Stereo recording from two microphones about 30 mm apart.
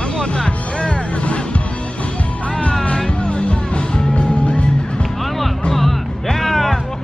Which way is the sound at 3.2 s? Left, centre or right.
Left.